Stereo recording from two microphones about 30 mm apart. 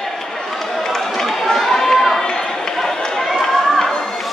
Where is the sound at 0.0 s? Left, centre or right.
Centre.